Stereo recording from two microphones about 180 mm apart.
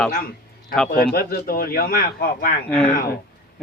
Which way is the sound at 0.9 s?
55° left (ahead or behind).